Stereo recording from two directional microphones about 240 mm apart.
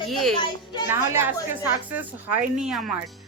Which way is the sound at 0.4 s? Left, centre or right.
Centre.